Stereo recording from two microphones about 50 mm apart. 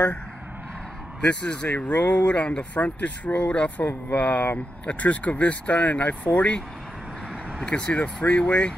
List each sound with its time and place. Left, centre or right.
1.2 s speech: left
7.6 s speech: left